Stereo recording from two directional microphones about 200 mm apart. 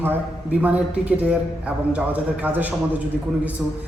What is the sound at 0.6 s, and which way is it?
A man's voice, 10° right (ahead or behind).